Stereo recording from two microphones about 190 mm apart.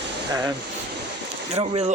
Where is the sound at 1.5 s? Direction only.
30° right (ahead or behind).